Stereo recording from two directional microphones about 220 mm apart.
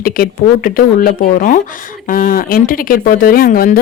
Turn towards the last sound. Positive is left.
turn(degrees=40)  # may be behind; listen again after turning